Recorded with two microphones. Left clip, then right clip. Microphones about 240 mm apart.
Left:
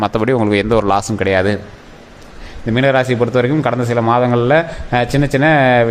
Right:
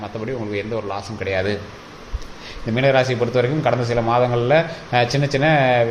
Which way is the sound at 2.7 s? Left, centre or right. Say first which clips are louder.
Left 3 dB; left.